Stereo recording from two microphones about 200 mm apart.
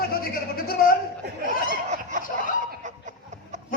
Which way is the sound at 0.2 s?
45° left (ahead or behind).